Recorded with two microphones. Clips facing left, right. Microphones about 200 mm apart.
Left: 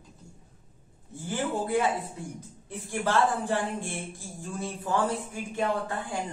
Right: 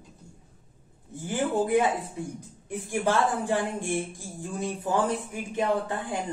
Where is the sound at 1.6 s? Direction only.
20° right (ahead or behind).